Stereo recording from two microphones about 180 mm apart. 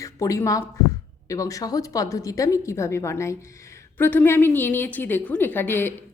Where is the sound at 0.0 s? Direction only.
20° left (ahead or behind).